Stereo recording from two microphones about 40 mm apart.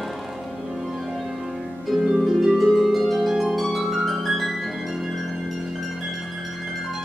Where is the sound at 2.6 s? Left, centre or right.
Centre.